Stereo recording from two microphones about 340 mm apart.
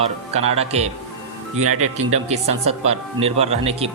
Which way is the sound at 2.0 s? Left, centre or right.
Centre.